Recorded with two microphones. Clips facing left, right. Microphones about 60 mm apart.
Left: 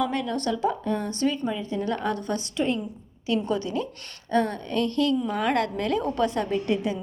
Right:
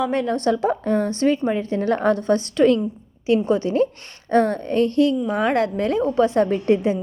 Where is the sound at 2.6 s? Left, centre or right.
Right.